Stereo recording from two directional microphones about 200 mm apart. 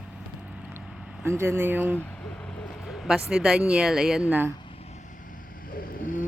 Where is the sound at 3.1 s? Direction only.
Centre (ahead or behind).